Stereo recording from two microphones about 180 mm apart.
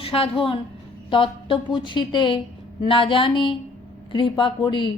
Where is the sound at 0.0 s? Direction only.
30° left (ahead or behind).